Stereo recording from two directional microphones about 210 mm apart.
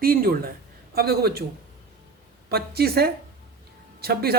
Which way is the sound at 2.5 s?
50° right (ahead or behind).